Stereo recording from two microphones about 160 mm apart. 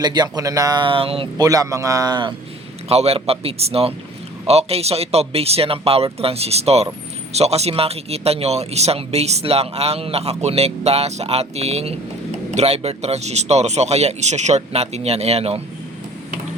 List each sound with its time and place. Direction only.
0.0 s speech: 25° right (ahead or behind)
1.4 s speech: 20° right (ahead or behind)
2.9 s a man's voice: 40° right (ahead or behind)